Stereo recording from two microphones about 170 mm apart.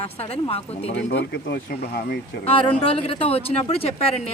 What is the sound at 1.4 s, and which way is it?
Speech, 75° left (ahead or behind).